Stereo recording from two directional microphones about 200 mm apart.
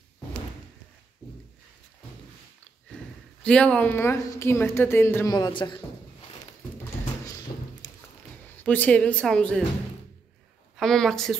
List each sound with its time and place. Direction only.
3.4 s a woman's voice: 5° left (ahead or behind); by 5.8 s 25° left (ahead or behind)
7.8 s a sound: 20° left (ahead or behind)
8.6 s speech: 5° left (ahead or behind)
10.8 s speech: centre (ahead or behind)